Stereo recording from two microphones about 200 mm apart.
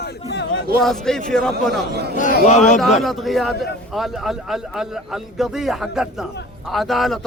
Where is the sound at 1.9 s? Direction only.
55° right (ahead or behind).